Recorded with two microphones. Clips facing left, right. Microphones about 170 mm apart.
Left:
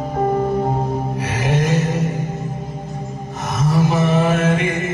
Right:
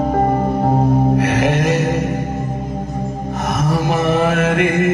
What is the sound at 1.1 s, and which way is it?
Music, 65° right (ahead or behind).